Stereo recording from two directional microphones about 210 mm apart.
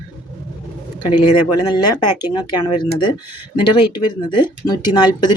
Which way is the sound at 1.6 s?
20° left (ahead or behind).